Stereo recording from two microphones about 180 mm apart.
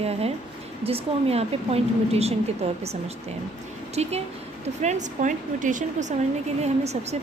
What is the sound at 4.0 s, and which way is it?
A woman's voice, 35° right (ahead or behind).